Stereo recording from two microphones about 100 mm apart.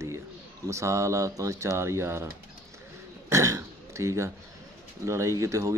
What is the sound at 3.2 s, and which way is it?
Burping, 30° right (ahead or behind).